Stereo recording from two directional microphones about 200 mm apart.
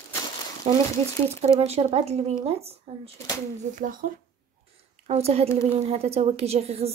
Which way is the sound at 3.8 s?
40° right (ahead or behind).